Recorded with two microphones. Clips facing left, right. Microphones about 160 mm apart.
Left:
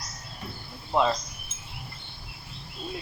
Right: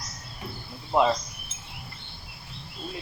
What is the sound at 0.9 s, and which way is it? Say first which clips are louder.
Speech: right 2 dB; 5° right (ahead or behind).